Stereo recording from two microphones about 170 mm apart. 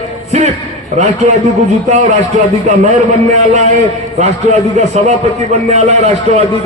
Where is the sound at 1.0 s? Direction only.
40° right (ahead or behind).